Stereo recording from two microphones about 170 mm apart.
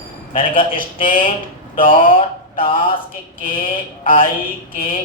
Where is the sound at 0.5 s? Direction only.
55° left (ahead or behind).